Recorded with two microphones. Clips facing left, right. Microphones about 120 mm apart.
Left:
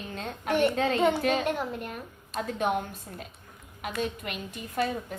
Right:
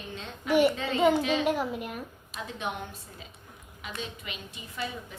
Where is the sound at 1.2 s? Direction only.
50° left (ahead or behind).